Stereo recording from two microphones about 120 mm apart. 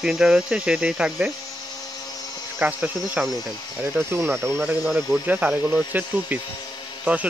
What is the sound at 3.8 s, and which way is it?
Speech, 20° right (ahead or behind).